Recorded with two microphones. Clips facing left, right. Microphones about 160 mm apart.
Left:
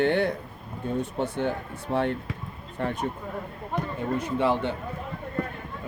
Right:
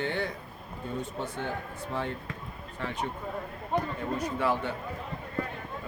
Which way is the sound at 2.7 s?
50° left (ahead or behind).